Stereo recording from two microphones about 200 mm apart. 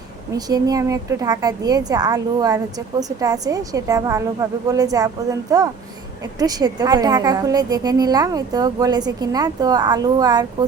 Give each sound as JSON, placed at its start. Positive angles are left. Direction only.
{"t": 0.3, "sound": "a woman's voice", "side_deg": -20}